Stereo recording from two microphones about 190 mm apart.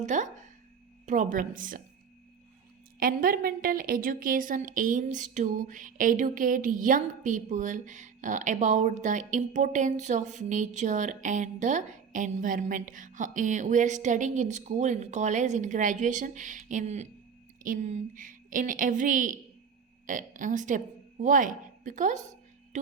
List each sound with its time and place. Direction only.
0.0 s a woman's voice: 40° right (ahead or behind)
3.0 s a woman's voice: 50° right (ahead or behind)
22.7 s a sound: 40° right (ahead or behind)